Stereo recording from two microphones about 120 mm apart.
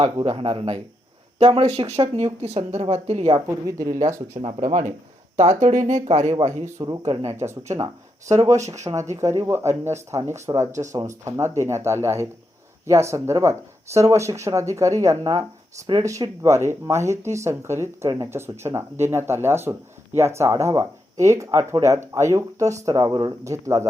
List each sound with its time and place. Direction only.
0.3 s a woman's voice: 50° right (ahead or behind)
3.4 s speech: 25° right (ahead or behind)
4.4 s speech: 45° right (ahead or behind)
4.6 s speech: 90° right
5.4 s speech: 75° right (ahead or behind)
6.8 s speech: 40° right (ahead or behind)
7.3 s speech: 20° right (ahead or behind)
10.7 s speech: 90° right
11.3 s speech: 25° right (ahead or behind)